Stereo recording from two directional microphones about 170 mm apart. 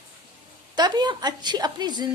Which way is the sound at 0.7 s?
25° right (ahead or behind).